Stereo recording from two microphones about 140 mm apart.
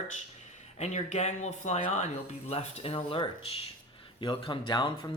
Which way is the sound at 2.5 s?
45° left (ahead or behind).